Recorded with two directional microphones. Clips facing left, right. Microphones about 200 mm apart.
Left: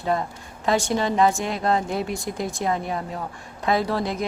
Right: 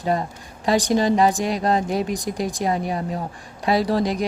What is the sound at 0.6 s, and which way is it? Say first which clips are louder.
Speech: right 4 dB; 15° right (ahead or behind).